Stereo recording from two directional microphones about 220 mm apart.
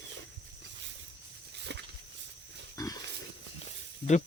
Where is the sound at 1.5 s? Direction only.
50° right (ahead or behind).